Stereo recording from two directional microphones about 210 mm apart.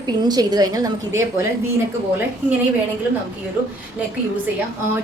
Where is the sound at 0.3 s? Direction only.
20° right (ahead or behind).